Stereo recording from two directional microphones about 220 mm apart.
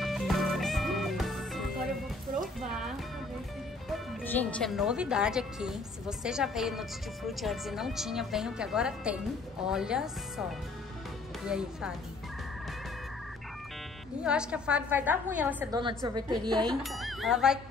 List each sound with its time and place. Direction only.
0.0 s music: centre (ahead or behind)
3.9 s speech: 5° left (ahead or behind)
11.4 s music: 5° right (ahead or behind)
14.2 s a woman's voice: 5° right (ahead or behind)
15.8 s a woman's voice: 20° right (ahead or behind)
16.8 s speech: centre (ahead or behind)